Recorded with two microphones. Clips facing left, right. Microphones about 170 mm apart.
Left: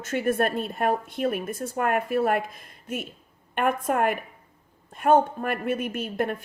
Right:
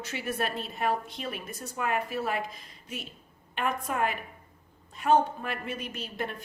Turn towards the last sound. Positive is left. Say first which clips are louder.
# left 8 dB
turn(degrees=55)  # may be behind; listen again after turning